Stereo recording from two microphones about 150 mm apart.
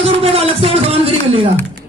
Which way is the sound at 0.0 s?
40° right (ahead or behind).